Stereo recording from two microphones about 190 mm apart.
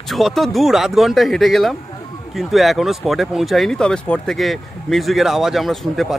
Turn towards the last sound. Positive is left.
turn(degrees=0)  # may be behind; listen again after turning